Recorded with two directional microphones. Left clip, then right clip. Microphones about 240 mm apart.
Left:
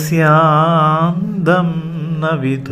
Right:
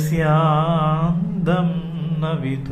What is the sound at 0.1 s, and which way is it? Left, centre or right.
Mantra, left.